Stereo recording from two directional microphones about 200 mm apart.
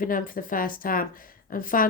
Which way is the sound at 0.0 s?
45° left (ahead or behind).